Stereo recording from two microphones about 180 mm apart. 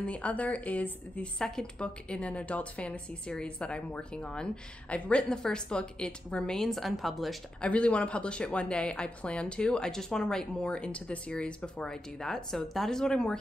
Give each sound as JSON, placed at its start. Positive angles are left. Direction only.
{"t": 0.0, "sound": "a woman's voice", "side_deg": 5}